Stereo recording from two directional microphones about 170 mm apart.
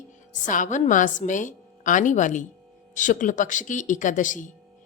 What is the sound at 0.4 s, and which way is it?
A woman's voice, 50° left (ahead or behind).